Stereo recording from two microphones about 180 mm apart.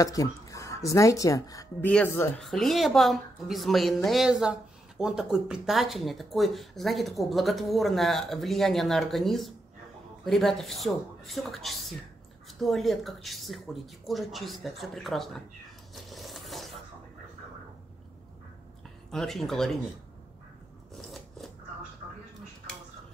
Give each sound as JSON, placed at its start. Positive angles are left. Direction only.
{"t": 0.0, "sound": "a woman's voice", "side_deg": 20}
{"t": 15.9, "sound": "zipper", "side_deg": 0}
{"t": 19.0, "sound": "a woman's voice", "side_deg": 0}
{"t": 20.9, "sound": "scissors", "side_deg": 0}